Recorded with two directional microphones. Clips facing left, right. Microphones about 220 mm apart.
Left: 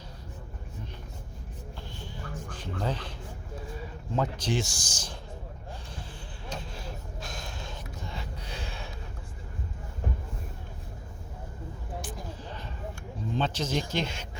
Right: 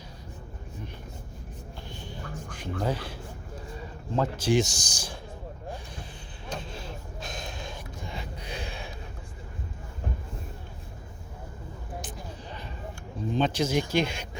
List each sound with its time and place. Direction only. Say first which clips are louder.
2.0 s speech: right 1 dB; 15° right (ahead or behind)
6.7 s gasp: right 1 dB; 25° right (ahead or behind)
12.0 s a sound: left 1 dB; 15° right (ahead or behind)
13.3 s speech: right 4 dB; 15° right (ahead or behind)